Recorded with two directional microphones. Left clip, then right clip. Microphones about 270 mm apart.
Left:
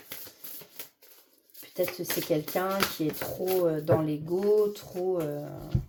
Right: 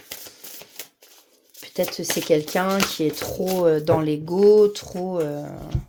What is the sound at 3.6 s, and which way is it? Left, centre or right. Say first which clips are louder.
Speech: right 9 dB; right.